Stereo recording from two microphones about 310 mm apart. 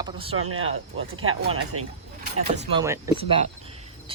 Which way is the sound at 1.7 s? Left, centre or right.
Right.